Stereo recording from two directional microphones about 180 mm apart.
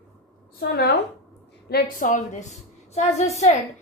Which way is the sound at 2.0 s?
40° left (ahead or behind).